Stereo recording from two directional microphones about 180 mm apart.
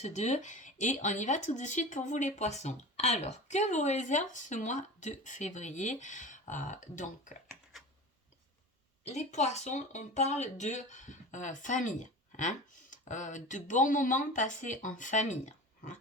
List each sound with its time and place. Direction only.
0.0 s speech: 40° left (ahead or behind)
9.0 s speech: 40° left (ahead or behind)